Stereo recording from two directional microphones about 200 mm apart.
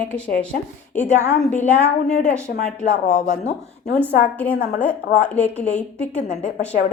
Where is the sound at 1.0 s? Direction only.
35° left (ahead or behind).